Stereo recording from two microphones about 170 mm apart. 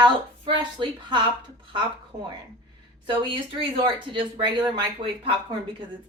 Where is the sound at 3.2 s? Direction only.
30° right (ahead or behind).